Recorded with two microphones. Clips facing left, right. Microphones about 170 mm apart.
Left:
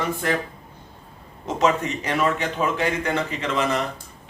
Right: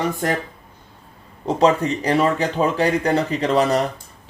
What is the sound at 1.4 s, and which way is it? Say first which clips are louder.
Speech: right 5 dB; 35° right (ahead or behind).